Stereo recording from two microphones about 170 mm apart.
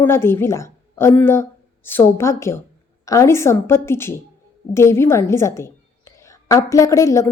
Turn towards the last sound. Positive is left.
turn(degrees=20)  # may be behind; listen again after turning